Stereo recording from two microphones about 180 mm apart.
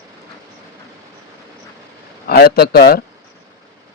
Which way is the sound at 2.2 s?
60° left (ahead or behind).